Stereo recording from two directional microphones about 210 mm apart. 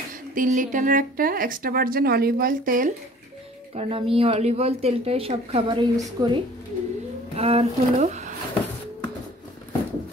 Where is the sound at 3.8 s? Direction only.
25° right (ahead or behind).